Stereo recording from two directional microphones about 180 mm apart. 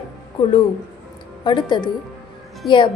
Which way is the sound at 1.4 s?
25° left (ahead or behind).